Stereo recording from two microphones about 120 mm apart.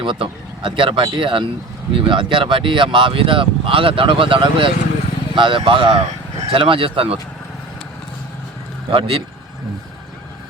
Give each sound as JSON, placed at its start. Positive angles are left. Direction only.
{"t": 0.0, "sound": "speech", "side_deg": -45}
{"t": 8.9, "sound": "speech", "side_deg": -50}